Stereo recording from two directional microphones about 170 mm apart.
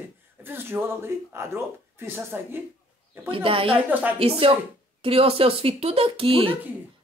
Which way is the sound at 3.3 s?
30° right (ahead or behind).